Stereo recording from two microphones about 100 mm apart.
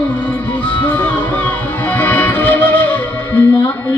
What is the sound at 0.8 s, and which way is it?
Music, 20° left (ahead or behind).